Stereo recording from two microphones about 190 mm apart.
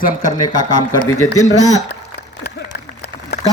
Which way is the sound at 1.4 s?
35° left (ahead or behind).